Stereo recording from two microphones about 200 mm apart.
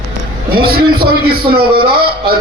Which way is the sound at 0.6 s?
50° right (ahead or behind).